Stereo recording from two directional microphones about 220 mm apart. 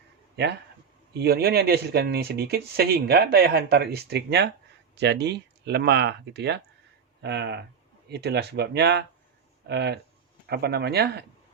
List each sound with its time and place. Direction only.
1.1 s speech: 45° right (ahead or behind)